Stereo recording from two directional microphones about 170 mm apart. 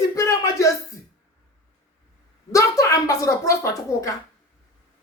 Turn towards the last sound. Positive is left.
turn(degrees=20)  # may be behind; listen again after turning